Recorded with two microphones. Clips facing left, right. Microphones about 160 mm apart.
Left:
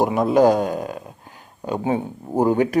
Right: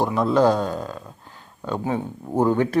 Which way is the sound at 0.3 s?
15° left (ahead or behind).